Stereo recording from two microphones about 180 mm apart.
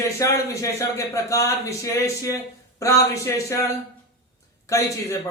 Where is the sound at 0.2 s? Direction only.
15° left (ahead or behind).